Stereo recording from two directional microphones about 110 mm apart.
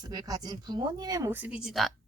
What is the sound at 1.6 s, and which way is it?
Speech, centre (ahead or behind).